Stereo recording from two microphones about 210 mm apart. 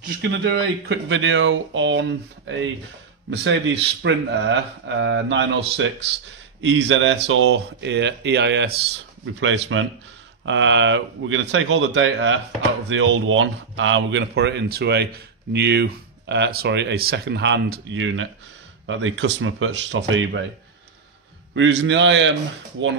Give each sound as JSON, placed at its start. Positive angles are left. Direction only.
{"t": 0.5, "sound": "speech", "side_deg": -60}
{"t": 21.5, "sound": "speech", "side_deg": -60}